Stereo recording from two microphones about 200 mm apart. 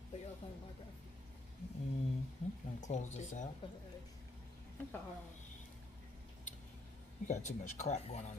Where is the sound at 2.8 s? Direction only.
35° left (ahead or behind).